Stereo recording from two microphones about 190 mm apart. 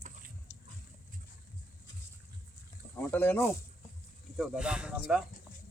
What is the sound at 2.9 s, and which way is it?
Speech, 10° left (ahead or behind).